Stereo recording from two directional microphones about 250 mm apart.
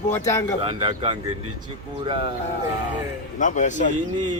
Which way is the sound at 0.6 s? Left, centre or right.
Right.